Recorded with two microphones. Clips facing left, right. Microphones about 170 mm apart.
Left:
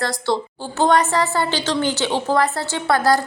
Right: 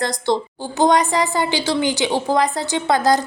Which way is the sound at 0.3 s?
20° right (ahead or behind).